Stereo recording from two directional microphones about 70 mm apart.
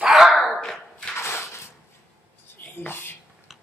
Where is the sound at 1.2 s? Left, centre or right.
Left.